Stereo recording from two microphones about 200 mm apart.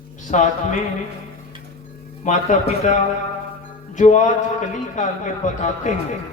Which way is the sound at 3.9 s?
40° left (ahead or behind).